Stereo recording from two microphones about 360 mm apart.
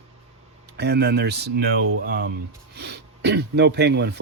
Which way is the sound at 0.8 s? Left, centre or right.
Right.